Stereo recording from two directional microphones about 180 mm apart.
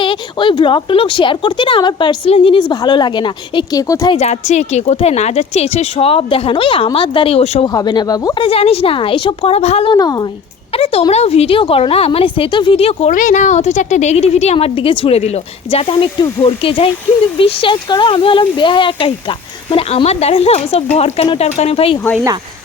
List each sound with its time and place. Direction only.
0.0 s speech: 25° left (ahead or behind)
4.1 s a woman's voice: 35° left (ahead or behind)
7.7 s speech: 20° left (ahead or behind)
8.4 s a woman's voice: 35° left (ahead or behind)
10.7 s a woman's voice: 35° left (ahead or behind)